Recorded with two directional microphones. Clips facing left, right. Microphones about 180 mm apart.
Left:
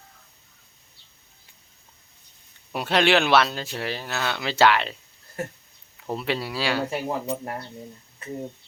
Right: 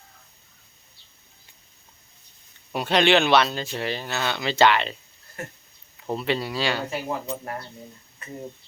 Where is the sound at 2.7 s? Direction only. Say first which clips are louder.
Right 1 dB; 5° left (ahead or behind).